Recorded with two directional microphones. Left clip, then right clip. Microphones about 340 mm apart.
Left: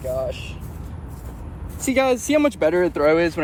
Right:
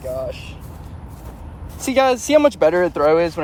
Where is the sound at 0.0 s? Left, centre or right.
Centre.